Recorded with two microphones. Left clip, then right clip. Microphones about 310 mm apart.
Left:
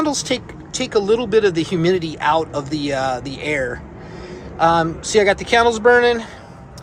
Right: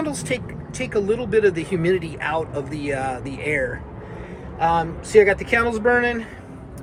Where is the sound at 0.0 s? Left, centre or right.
Centre.